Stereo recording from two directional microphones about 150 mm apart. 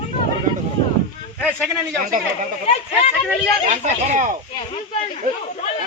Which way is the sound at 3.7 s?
50° right (ahead or behind).